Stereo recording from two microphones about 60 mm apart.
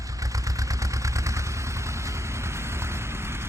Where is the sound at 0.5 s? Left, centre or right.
Right.